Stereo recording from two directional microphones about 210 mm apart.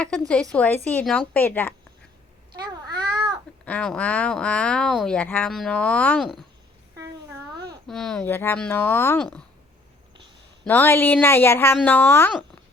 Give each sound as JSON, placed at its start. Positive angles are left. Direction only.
{"t": 0.0, "sound": "a woman's voice", "side_deg": 5}
{"t": 2.8, "sound": "babbling", "side_deg": -20}
{"t": 3.7, "sound": "speech", "side_deg": 5}
{"t": 7.9, "sound": "a woman's voice", "side_deg": 5}
{"t": 10.7, "sound": "a woman's voice", "side_deg": 10}